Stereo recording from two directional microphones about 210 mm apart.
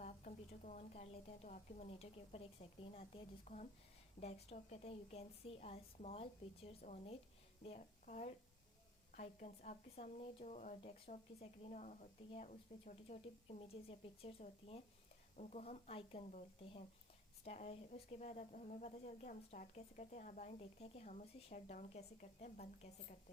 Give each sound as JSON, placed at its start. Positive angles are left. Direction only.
{"t": 0.0, "sound": "a woman's voice", "side_deg": 35}